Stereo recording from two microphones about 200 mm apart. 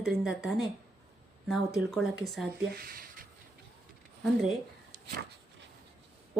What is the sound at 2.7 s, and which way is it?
Speech, 45° right (ahead or behind).